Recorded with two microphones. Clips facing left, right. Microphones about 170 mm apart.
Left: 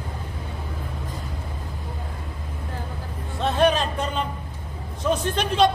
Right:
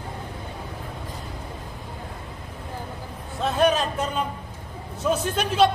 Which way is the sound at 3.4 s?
Centre (ahead or behind).